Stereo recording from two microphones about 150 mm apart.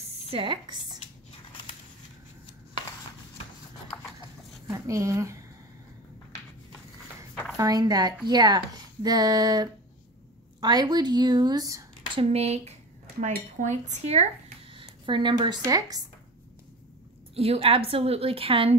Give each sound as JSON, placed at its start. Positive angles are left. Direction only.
{"t": 0.3, "sound": "a woman's voice", "side_deg": -35}
{"t": 3.9, "sound": "horse", "side_deg": 10}
{"t": 4.6, "sound": "speech", "side_deg": -20}
{"t": 7.5, "sound": "speech", "side_deg": -25}
{"t": 12.2, "sound": "speech", "side_deg": -45}
{"t": 14.7, "sound": "speech", "side_deg": -35}
{"t": 17.4, "sound": "a woman's voice", "side_deg": -40}